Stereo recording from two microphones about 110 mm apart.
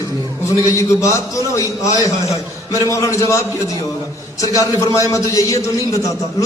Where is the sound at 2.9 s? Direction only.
30° left (ahead or behind).